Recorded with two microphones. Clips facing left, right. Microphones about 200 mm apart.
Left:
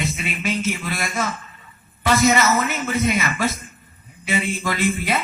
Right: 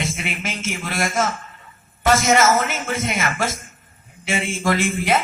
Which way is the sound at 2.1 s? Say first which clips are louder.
Even; 50° right (ahead or behind).